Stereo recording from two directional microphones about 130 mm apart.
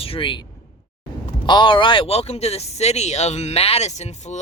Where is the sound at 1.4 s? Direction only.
35° left (ahead or behind).